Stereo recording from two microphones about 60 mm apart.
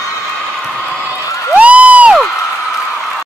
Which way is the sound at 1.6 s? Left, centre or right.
Right.